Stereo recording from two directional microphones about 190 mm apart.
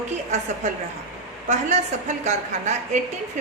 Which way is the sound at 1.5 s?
40° right (ahead or behind).